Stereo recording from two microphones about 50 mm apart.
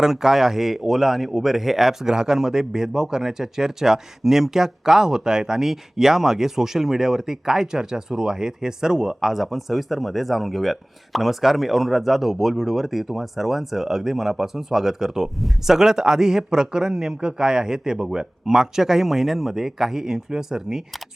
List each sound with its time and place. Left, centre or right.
0.0 s speech: centre